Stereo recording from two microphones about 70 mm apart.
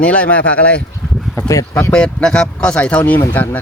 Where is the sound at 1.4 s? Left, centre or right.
Left.